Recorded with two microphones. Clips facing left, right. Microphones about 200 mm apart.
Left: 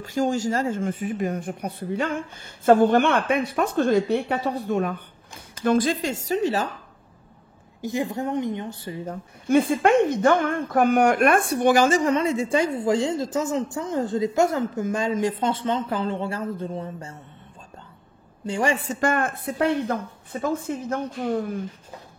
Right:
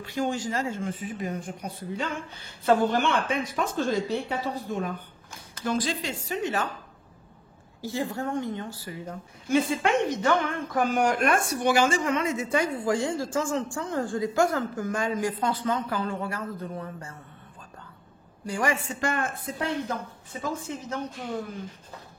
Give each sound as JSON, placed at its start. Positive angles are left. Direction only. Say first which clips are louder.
{"t": 0.0, "sound": "a woman's voice", "louder": "left 5 dB", "side_deg": 40}
{"t": 5.6, "sound": "speech", "louder": "left 7 dB", "side_deg": 55}
{"t": 7.8, "sound": "a woman's voice", "louder": "left 4 dB", "side_deg": 15}
{"t": 9.0, "sound": "a woman's voice", "louder": "left 6 dB", "side_deg": 55}
{"t": 18.4, "sound": "a woman's voice", "louder": "left 4 dB", "side_deg": 25}